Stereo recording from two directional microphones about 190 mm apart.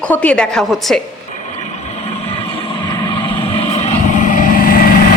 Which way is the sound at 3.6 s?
35° left (ahead or behind).